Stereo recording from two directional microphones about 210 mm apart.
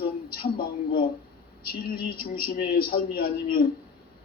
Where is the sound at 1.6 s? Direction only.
45° left (ahead or behind).